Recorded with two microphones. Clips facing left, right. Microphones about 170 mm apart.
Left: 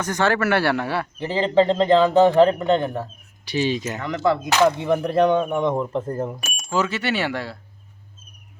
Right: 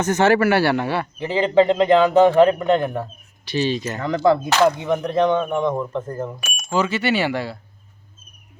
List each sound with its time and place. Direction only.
0.0 s speech: 20° right (ahead or behind)
0.3 s speech: 5° right (ahead or behind)
3.4 s speech: 15° left (ahead or behind)
4.0 s speech: 40° right (ahead or behind)
4.9 s speech: 5° left (ahead or behind)
5.7 s speech: 30° left (ahead or behind)
6.7 s speech: centre (ahead or behind)